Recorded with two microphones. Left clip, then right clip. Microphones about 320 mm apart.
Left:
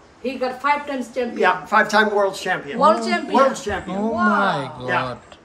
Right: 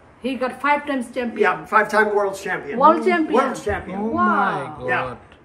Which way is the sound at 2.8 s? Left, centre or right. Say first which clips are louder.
Right 2 dB; centre.